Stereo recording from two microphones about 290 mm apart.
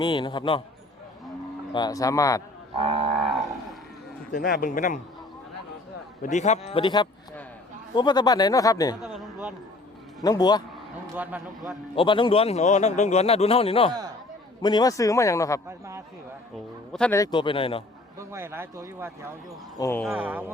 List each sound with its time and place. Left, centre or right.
0.0 s speech: centre
1.7 s speech: centre
2.7 s livestock: centre
3.2 s cattle: centre
4.3 s a man's voice: left
6.2 s a man's voice: left
9.0 s a sound: centre
10.2 s speech: centre
11.0 s speech: centre
11.9 s a man's voice: centre
16.9 s speech: centre
18.2 s speech: centre
19.8 s speech: centre